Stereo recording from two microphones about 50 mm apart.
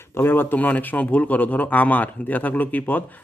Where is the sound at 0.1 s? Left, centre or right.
Left.